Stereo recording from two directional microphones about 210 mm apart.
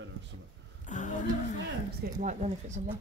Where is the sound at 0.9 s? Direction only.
35° left (ahead or behind).